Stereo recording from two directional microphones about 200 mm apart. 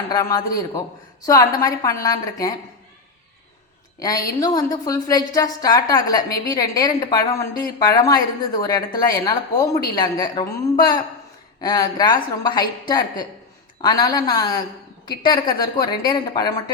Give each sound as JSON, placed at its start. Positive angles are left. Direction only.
{"t": 0.1, "sound": "a woman's voice", "side_deg": 15}
{"t": 4.0, "sound": "a woman's voice", "side_deg": 15}